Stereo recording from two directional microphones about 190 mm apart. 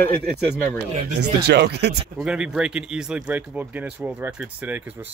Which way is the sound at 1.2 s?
60° right (ahead or behind).